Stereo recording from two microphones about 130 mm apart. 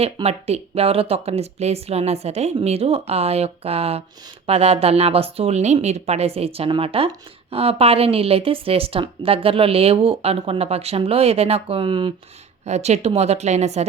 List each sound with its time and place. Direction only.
0.0 s a woman's voice: 50° right (ahead or behind)
12.6 s a woman's voice: 60° right (ahead or behind)